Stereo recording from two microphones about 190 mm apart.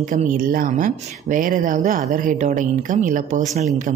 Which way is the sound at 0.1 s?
45° right (ahead or behind).